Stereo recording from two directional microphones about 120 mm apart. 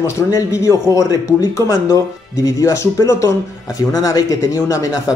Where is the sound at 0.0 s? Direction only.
25° left (ahead or behind).